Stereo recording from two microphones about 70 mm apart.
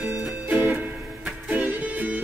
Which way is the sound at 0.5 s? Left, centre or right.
Right.